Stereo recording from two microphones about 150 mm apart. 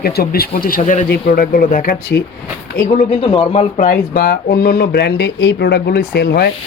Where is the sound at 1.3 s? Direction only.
65° left (ahead or behind).